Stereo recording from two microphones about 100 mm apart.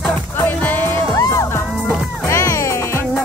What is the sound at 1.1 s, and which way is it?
Music, 30° left (ahead or behind).